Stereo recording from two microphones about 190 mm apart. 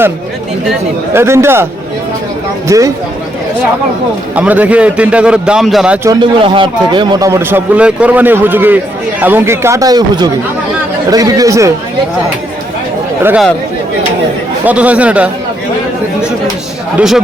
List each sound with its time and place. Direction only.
1.1 s a man's voice: 15° right (ahead or behind)
2.6 s a man's voice: 15° right (ahead or behind)
4.4 s a man's voice: 10° right (ahead or behind)
6.1 s a man's voice: 25° right (ahead or behind)
13.2 s a man's voice: 5° right (ahead or behind)
14.6 s a man's voice: 10° right (ahead or behind)